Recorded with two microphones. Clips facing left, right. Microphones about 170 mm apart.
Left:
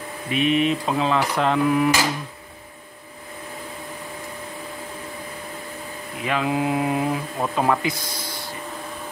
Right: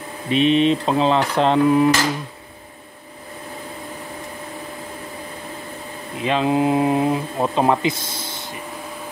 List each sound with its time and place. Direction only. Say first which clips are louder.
0.3 s speech: right 4 dB; 25° right (ahead or behind)
6.1 s speech: right 5 dB; 25° right (ahead or behind)